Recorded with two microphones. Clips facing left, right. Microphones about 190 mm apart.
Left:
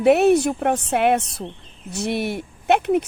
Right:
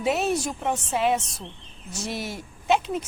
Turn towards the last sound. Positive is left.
turn(degrees=60)  # may be behind; listen again after turning